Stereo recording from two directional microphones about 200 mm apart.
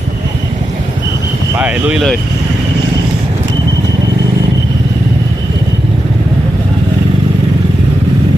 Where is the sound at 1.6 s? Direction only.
5° right (ahead or behind).